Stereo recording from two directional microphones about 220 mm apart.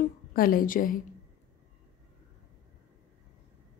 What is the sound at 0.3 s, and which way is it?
Speech, 40° left (ahead or behind).